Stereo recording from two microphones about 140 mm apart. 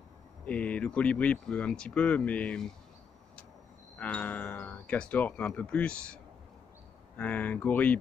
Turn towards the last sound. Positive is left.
turn(degrees=10)  # may be behind; listen again after turning